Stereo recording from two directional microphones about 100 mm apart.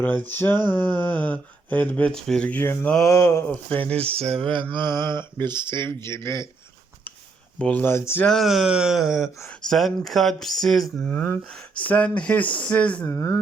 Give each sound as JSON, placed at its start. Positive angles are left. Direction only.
{"t": 0.0, "sound": "speech", "side_deg": 15}
{"t": 2.5, "sound": "speech", "side_deg": 20}
{"t": 4.1, "sound": "a sound", "side_deg": -80}
{"t": 4.7, "sound": "a sound", "side_deg": -45}
{"t": 5.8, "sound": "speech", "side_deg": 25}
{"t": 7.6, "sound": "speech", "side_deg": 15}
{"t": 8.2, "sound": "speech", "side_deg": 5}
{"t": 13.1, "sound": "speech", "side_deg": 35}